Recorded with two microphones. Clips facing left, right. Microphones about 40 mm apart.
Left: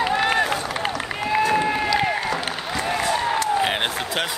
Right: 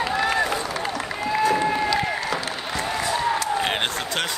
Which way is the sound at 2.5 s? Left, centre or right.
Centre.